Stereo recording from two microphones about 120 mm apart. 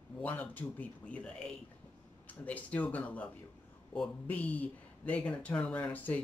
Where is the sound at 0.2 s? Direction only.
15° left (ahead or behind).